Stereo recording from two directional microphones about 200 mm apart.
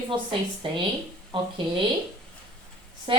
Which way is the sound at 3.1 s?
25° right (ahead or behind).